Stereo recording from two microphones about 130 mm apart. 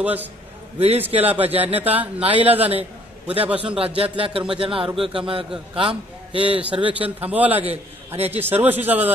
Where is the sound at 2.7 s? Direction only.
50° right (ahead or behind).